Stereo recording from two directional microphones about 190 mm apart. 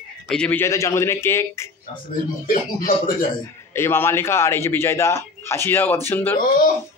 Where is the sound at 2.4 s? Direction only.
50° left (ahead or behind).